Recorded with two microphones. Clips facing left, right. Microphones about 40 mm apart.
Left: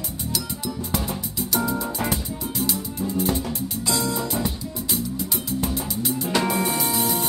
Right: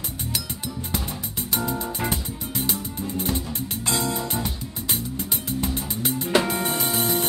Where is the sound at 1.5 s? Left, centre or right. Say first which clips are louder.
Left 2 dB; right.